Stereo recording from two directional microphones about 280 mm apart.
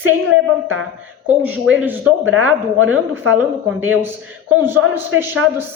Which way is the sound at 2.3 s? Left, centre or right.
Right.